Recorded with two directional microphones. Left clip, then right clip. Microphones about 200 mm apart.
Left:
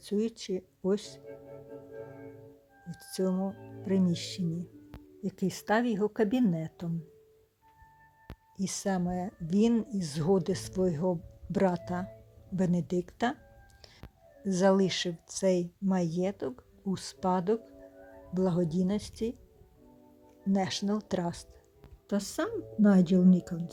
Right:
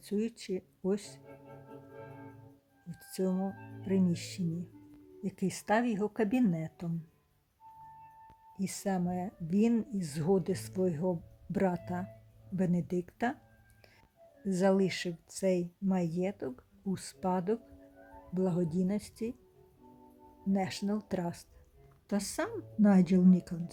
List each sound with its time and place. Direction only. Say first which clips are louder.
0.0 s speech: left 4 dB; 5° left (ahead or behind)
2.9 s speech: left 3 dB; 5° left (ahead or behind)
8.6 s speech: left 3 dB; centre (ahead or behind)
20.5 s speech: left 3 dB; 5° left (ahead or behind)